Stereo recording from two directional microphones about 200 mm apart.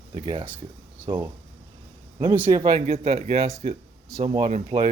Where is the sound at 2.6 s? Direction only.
25° right (ahead or behind).